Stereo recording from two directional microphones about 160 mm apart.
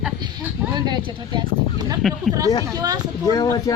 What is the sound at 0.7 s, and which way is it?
A woman's voice, 25° right (ahead or behind).